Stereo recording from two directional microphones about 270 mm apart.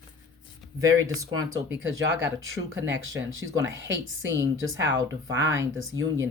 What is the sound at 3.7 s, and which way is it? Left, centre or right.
Speech, right.